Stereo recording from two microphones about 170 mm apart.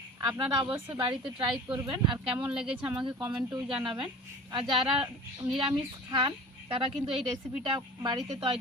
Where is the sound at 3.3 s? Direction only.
25° right (ahead or behind).